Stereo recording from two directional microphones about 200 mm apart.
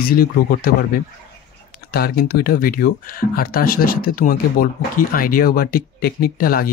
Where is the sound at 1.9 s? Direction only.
50° left (ahead or behind).